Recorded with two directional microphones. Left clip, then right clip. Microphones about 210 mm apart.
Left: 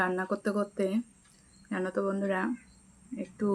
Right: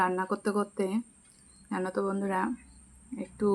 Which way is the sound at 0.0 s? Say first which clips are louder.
Right 2 dB; centre (ahead or behind).